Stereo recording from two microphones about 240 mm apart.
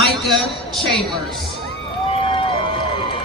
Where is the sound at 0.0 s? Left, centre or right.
Centre.